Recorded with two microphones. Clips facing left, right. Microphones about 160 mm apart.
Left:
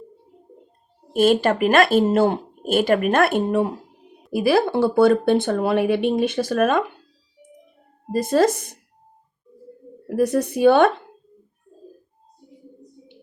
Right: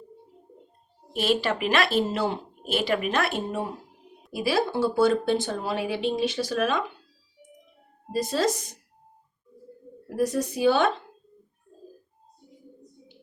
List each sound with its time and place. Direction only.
1.1 s speech: 50° left (ahead or behind)
8.1 s speech: 55° left (ahead or behind)
10.1 s speech: 60° left (ahead or behind)